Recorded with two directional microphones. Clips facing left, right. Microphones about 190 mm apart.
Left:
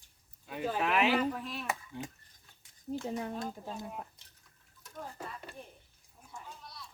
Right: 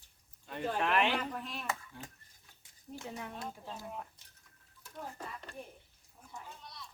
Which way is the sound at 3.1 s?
35° left (ahead or behind).